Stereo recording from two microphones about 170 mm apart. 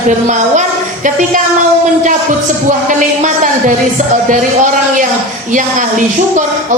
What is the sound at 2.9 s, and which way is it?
Speech, 45° right (ahead or behind).